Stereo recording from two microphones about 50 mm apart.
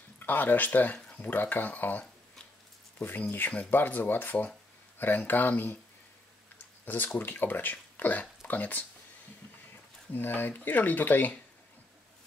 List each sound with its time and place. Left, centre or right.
0.2 s speech: left
7.2 s speech: left
10.1 s speech: left